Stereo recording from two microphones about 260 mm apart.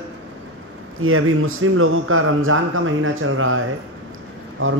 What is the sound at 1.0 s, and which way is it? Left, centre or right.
A man's voice, right.